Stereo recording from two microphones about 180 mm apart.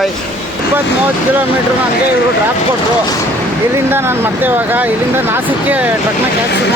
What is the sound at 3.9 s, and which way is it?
Speech, 10° right (ahead or behind).